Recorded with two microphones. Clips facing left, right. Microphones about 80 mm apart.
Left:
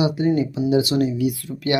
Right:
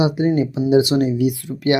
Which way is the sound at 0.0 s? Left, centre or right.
Right.